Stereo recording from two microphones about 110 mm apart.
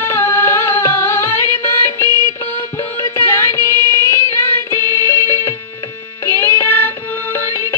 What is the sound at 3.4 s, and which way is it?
Music, 25° left (ahead or behind).